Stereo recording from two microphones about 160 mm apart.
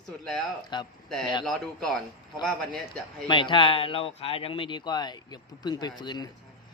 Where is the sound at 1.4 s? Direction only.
Centre (ahead or behind).